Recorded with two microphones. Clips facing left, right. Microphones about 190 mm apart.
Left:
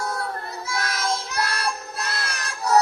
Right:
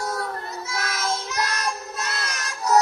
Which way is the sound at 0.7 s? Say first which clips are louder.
Left 2 dB; 30° left (ahead or behind).